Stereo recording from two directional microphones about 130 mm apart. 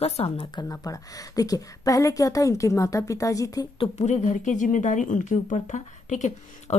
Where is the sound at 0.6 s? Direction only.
25° left (ahead or behind).